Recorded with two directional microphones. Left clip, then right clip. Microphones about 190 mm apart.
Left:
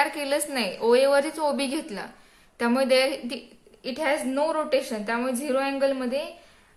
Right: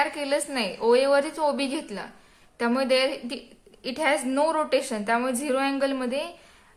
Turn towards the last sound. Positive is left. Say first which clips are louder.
# even
turn(degrees=-15)  # may be behind; listen again after turning